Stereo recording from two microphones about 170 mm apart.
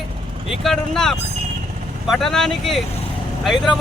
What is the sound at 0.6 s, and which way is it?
Speech, centre (ahead or behind).